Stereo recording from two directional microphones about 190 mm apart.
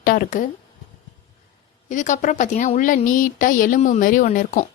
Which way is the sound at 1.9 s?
40° left (ahead or behind).